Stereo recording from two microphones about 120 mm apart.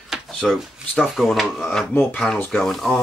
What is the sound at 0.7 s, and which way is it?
Speech, centre (ahead or behind).